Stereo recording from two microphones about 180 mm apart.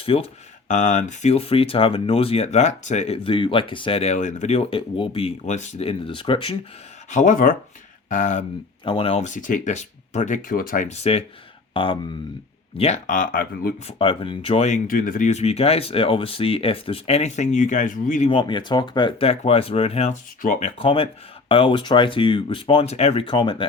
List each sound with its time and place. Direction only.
0.0 s speech: 30° left (ahead or behind)
7.1 s speech: 45° left (ahead or behind)
8.8 s speech: 30° left (ahead or behind); by 13.7 s 55° left (ahead or behind)
13.8 s speech: 30° left (ahead or behind); by 18.3 s 45° left (ahead or behind)
18.3 s speech: 25° left (ahead or behind)
23.2 s speech: 25° left (ahead or behind)